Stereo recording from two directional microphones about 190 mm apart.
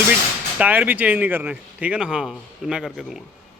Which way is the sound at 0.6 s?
10° right (ahead or behind).